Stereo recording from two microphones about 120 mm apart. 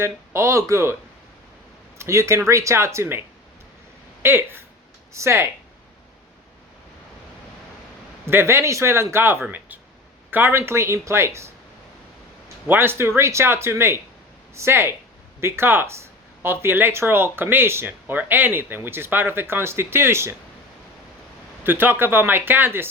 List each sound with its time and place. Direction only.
0.0 s speech: 25° right (ahead or behind)
2.0 s speech: 25° right (ahead or behind)
4.2 s speech: 20° right (ahead or behind)
8.3 s speech: 20° right (ahead or behind)
12.6 s speech: 15° right (ahead or behind)
21.6 s speech: 15° right (ahead or behind)